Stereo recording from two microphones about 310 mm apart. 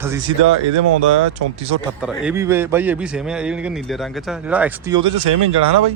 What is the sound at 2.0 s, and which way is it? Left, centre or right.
A man's voice, centre.